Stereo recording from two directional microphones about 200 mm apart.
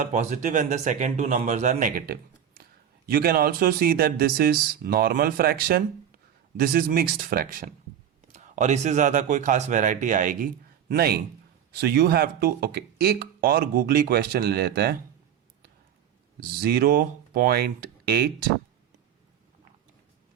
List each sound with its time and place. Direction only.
0.0 s speech: 35° right (ahead or behind)
16.4 s speech: 50° right (ahead or behind)